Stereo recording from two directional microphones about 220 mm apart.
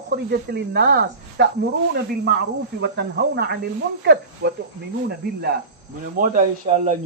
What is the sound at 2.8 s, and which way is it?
Speech, 50° right (ahead or behind).